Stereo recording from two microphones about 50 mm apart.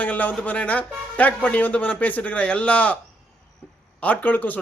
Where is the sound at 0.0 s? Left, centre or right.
Left.